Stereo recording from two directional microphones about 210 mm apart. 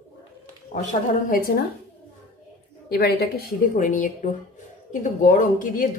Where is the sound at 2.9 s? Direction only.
50° left (ahead or behind).